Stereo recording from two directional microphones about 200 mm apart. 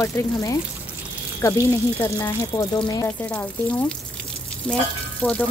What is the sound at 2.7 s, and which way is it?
Speech, 25° left (ahead or behind).